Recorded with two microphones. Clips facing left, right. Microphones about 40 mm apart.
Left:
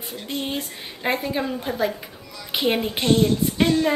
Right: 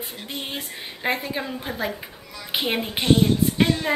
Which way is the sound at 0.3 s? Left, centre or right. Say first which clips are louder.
Left 5 dB; centre.